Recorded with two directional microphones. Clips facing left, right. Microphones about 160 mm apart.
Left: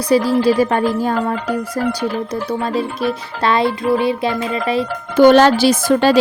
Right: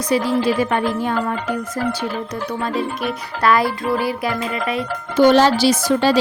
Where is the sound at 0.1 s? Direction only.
35° left (ahead or behind).